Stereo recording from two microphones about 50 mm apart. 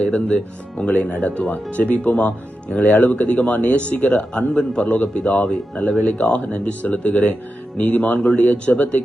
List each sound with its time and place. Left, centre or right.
0.0 s speech: left
5.5 s speech: centre
6.1 s speech: left